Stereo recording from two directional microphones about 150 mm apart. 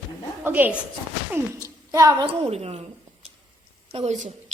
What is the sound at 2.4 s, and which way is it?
Speech, 45° right (ahead or behind).